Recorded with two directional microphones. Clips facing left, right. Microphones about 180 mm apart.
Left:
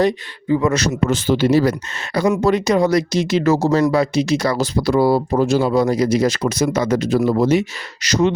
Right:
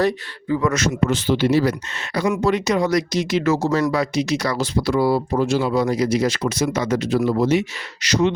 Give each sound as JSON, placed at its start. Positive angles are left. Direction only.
{"t": 0.0, "sound": "speech", "side_deg": 20}